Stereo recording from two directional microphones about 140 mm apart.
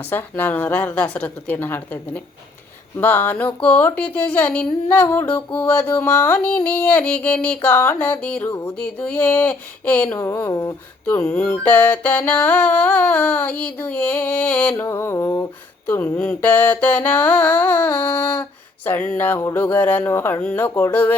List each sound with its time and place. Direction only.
0.1 s speech: 15° left (ahead or behind)
8.8 s speech: 10° left (ahead or behind)